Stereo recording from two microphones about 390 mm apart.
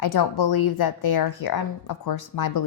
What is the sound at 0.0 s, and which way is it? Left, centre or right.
A woman's voice, left.